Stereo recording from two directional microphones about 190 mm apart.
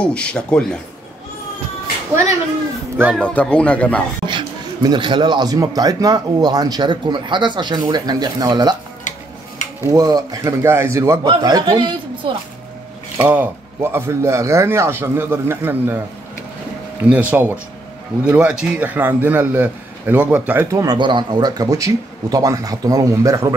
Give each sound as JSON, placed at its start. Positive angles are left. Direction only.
{"t": 0.0, "sound": "speech", "side_deg": 5}
{"t": 3.2, "sound": "speech", "side_deg": 5}
{"t": 4.3, "sound": "speech", "side_deg": -25}
{"t": 9.8, "sound": "speech", "side_deg": -20}
{"t": 13.2, "sound": "a man's voice", "side_deg": -10}
{"t": 17.0, "sound": "a man's voice", "side_deg": -10}